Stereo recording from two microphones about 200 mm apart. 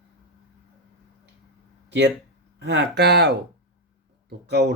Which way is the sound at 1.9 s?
55° right (ahead or behind).